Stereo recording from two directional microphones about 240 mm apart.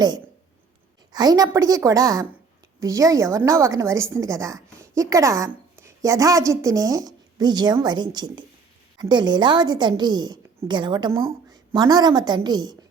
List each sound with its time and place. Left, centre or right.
1.1 s a woman's voice: centre